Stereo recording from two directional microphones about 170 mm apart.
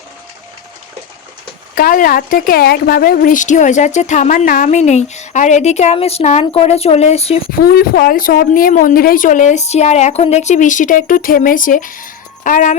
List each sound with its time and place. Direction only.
1.7 s a woman's voice: 55° left (ahead or behind); by 7.5 s 35° left (ahead or behind)
7.6 s a woman's voice: 65° left (ahead or behind)